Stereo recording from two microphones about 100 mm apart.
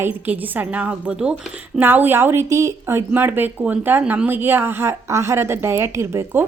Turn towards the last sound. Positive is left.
turn(degrees=-30)  # may be behind; listen again after turning